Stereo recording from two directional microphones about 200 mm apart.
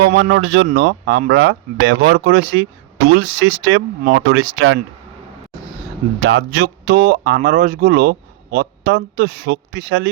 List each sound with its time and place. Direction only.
0.0 s speech: 55° right (ahead or behind); by 0.7 s 85° right
0.7 s speech: 50° right (ahead or behind)
3.1 s speech: 70° right (ahead or behind)
6.2 s speech: 60° right (ahead or behind)